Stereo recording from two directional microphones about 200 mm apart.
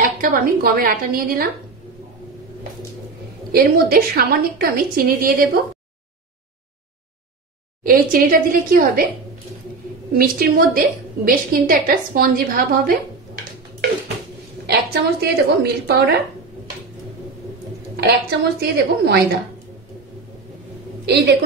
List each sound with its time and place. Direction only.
0.0 s a woman's voice: 45° right (ahead or behind)
3.5 s a woman's voice: 50° right (ahead or behind)
7.8 s a woman's voice: 45° right (ahead or behind)
10.1 s a woman's voice: 45° right (ahead or behind)
14.7 s a woman's voice: 50° right (ahead or behind)
18.6 s a woman's voice: 55° right (ahead or behind)
21.0 s a woman's voice: 55° right (ahead or behind)